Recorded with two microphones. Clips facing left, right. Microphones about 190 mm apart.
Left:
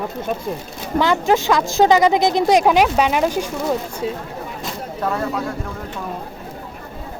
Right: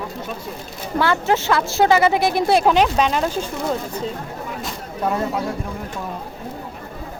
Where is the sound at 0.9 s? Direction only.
15° left (ahead or behind).